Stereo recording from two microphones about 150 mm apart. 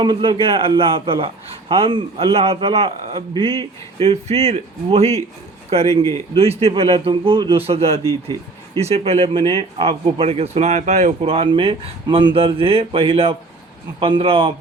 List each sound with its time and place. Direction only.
0.0 s speech: 35° right (ahead or behind)
5.9 s speech: 20° left (ahead or behind)
6.3 s speech: 40° right (ahead or behind)